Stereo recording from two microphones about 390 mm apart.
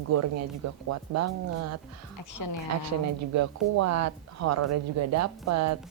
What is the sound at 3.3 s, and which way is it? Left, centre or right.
A woman's voice, right.